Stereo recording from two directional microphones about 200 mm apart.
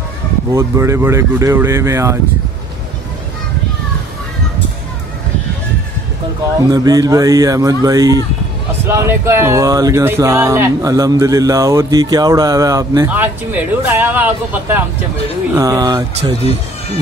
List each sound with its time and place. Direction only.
0.5 s speech: 15° right (ahead or behind)
6.7 s speech: 20° right (ahead or behind)